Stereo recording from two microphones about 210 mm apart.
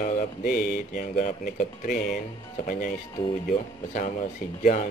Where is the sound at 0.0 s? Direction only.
40° left (ahead or behind).